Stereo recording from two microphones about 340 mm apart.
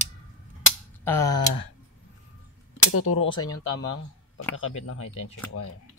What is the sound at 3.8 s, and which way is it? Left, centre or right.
Speech, left.